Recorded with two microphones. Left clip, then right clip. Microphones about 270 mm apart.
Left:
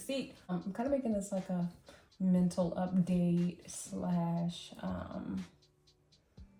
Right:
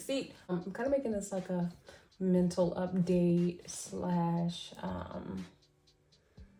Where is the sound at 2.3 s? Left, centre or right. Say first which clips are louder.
Right 4 dB; right.